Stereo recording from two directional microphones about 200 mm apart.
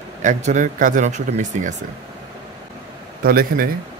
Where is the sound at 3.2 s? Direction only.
45° right (ahead or behind).